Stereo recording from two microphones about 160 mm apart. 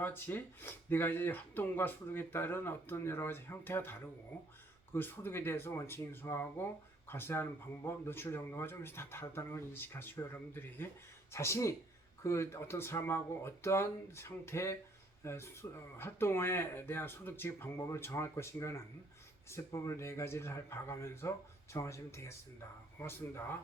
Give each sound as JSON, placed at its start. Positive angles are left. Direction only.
{"t": 0.0, "sound": "speech", "side_deg": 10}